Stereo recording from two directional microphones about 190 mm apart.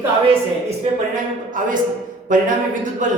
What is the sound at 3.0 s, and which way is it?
Speech, 40° right (ahead or behind).